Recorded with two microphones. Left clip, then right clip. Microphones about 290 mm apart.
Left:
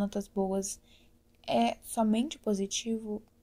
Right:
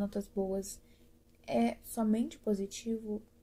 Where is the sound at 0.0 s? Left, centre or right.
Left.